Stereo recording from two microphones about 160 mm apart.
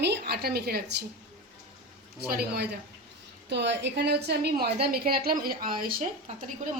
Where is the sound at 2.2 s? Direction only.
80° right.